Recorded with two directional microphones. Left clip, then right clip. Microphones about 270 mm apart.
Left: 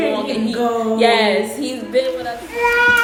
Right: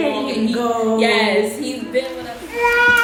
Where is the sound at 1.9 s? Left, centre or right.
Centre.